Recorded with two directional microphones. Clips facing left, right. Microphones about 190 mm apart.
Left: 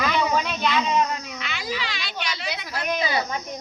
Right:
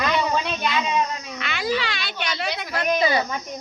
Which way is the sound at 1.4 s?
60° right (ahead or behind).